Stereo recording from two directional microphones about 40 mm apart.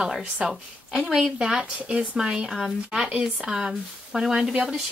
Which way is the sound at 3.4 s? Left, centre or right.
Centre.